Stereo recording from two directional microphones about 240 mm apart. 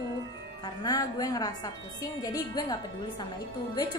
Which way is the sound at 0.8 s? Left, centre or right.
Centre.